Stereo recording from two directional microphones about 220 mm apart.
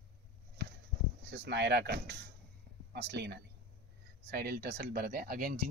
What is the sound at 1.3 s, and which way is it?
Speech, 50° right (ahead or behind).